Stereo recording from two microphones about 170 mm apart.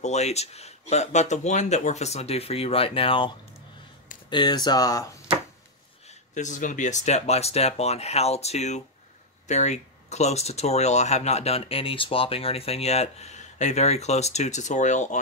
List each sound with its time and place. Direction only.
0.0 s speech: 40° left (ahead or behind)
4.3 s speech: 25° left (ahead or behind)
6.0 s speech: 45° left (ahead or behind)